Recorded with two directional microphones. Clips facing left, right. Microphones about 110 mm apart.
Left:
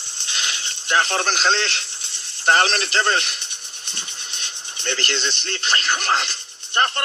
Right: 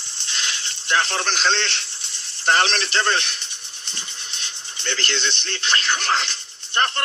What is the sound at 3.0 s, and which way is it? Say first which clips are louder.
Speech: left 1 dB; 10° left (ahead or behind).